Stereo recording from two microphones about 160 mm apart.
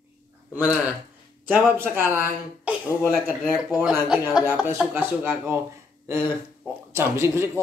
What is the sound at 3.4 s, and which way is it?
Speech, centre (ahead or behind).